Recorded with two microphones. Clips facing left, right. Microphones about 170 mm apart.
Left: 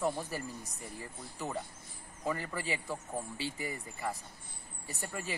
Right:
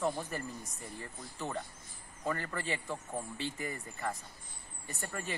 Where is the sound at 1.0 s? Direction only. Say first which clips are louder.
Even; 10° left (ahead or behind).